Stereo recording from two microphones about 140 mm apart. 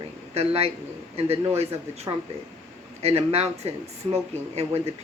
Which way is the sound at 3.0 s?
45° right (ahead or behind).